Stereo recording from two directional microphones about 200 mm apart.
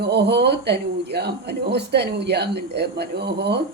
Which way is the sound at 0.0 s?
55° right (ahead or behind).